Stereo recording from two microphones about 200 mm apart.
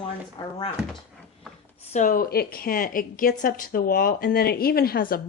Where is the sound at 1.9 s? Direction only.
40° left (ahead or behind).